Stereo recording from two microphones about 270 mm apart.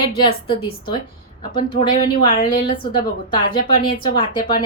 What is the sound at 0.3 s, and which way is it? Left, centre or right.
Speech, centre.